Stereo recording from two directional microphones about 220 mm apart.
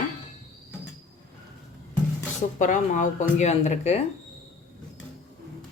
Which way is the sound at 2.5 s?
35° left (ahead or behind).